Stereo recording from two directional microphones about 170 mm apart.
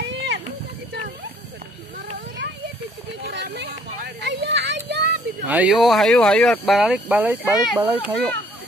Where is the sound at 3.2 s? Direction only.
90° right.